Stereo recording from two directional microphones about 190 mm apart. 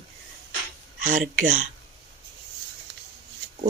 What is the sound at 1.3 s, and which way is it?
Speech, 45° right (ahead or behind).